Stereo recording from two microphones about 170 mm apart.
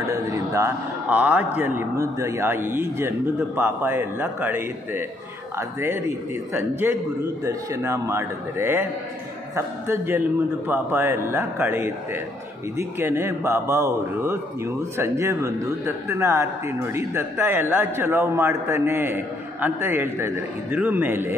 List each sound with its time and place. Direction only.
0.1 s speech: 20° right (ahead or behind)